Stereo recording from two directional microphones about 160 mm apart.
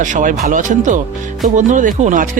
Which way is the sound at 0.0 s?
55° right (ahead or behind).